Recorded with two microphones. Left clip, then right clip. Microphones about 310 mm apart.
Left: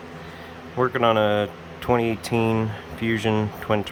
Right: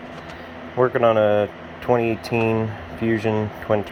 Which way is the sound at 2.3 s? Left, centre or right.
Left.